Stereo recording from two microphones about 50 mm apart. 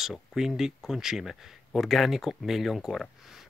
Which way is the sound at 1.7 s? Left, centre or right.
Centre.